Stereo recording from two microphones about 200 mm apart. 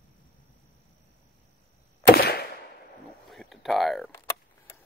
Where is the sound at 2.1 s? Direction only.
55° left (ahead or behind).